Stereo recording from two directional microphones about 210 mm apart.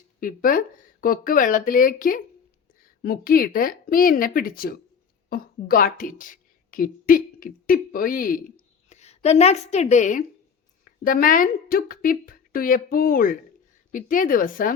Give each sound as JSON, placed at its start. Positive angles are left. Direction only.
{"t": 0.2, "sound": "a woman's voice", "side_deg": 40}